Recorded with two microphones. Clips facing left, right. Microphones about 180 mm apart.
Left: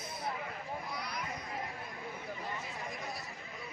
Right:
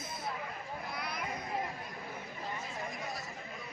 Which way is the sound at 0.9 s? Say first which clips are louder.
Right 1 dB; 55° right (ahead or behind).